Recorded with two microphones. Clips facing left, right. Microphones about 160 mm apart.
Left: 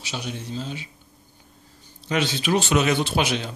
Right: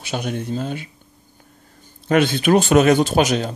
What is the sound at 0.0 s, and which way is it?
Speech, 55° right (ahead or behind).